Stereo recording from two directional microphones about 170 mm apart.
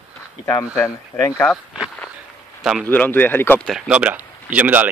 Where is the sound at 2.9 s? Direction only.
10° left (ahead or behind).